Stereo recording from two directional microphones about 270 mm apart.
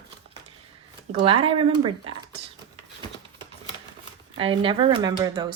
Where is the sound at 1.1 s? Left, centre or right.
Centre.